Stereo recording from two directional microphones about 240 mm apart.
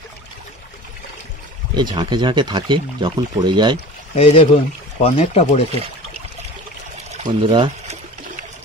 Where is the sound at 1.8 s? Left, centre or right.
Centre.